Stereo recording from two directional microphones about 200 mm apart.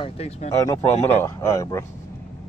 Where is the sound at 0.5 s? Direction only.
15° left (ahead or behind).